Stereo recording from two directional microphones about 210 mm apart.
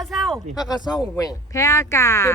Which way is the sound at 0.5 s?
20° left (ahead or behind).